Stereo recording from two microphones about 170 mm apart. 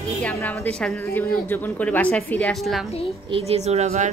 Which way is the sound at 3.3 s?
40° right (ahead or behind).